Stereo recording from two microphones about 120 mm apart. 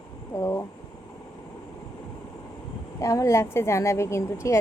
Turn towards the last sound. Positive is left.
turn(degrees=25)  # may be behind; listen again after turning